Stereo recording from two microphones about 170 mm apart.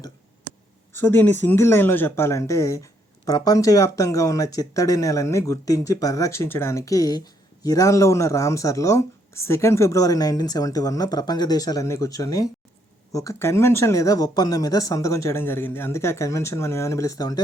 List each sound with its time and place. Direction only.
0.9 s speech: 10° left (ahead or behind)